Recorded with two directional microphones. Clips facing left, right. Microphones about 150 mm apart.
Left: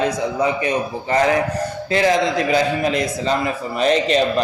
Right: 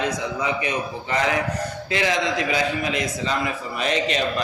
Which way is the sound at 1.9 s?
40° left (ahead or behind).